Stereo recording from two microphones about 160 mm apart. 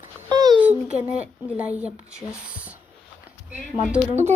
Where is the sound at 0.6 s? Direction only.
10° right (ahead or behind).